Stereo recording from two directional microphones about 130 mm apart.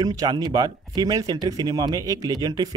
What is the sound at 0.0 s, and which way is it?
Speech, 30° right (ahead or behind).